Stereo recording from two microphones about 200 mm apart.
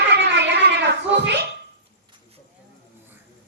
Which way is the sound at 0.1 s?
60° right (ahead or behind).